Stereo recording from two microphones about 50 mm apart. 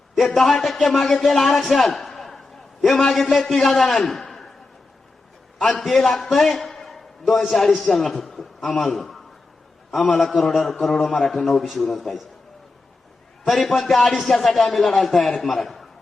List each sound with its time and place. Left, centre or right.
0.2 s a man's voice: centre
5.5 s a man's voice: centre
13.5 s a man's voice: centre